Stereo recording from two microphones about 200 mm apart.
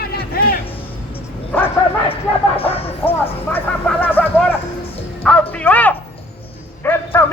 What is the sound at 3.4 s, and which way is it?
A man's voice, 10° left (ahead or behind).